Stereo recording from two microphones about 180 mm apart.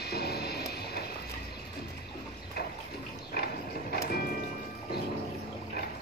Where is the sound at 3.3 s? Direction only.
60° left (ahead or behind).